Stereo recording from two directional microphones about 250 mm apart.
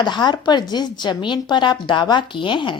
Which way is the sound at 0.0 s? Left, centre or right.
Centre.